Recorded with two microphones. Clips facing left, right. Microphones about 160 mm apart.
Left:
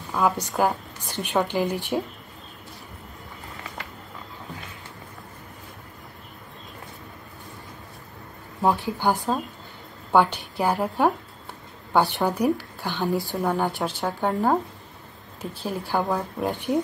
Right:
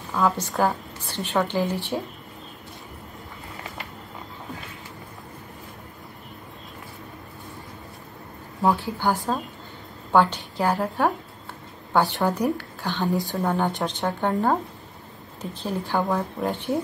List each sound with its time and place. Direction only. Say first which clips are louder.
0.2 s a woman's voice: even; 15° left (ahead or behind)
8.6 s a woman's voice: even; 20° left (ahead or behind)
13.1 s speech: even; 20° right (ahead or behind)
13.4 s speech: even; 5° left (ahead or behind)
15.8 s a woman's voice: right 1 dB; 10° left (ahead or behind)